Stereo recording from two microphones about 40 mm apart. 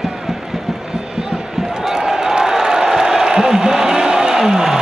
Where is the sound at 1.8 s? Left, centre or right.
Centre.